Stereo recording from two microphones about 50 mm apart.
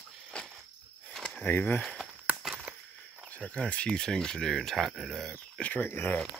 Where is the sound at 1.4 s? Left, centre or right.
Left.